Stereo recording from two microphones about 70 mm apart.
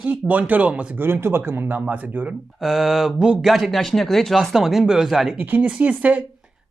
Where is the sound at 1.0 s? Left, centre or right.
Right.